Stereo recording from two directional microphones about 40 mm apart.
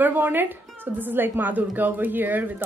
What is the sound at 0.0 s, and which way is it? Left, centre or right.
A woman's voice, right.